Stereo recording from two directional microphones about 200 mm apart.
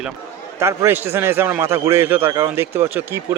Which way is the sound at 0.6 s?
15° right (ahead or behind).